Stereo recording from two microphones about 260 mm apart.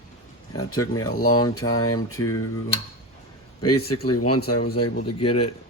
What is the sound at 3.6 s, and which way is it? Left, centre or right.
Speech, left.